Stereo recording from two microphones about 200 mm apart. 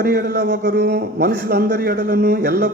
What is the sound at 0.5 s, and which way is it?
A man's voice, 60° right (ahead or behind).